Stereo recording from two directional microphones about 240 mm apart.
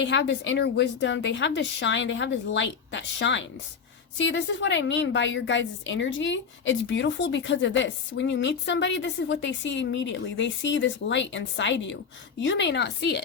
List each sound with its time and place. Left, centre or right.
0.0 s a woman's voice: left